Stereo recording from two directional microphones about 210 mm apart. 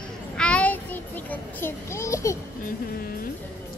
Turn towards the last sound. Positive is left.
turn(degrees=45)  # may be behind; listen again after turning